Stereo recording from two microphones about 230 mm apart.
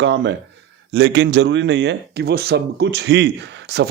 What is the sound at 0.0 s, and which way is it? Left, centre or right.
Speech, right.